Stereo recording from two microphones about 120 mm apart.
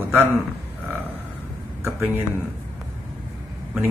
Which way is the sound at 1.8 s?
20° right (ahead or behind).